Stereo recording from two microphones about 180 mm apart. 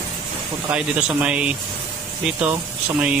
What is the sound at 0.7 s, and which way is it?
Speech, 5° right (ahead or behind).